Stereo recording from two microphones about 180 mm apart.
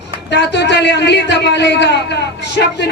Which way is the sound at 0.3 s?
70° left (ahead or behind).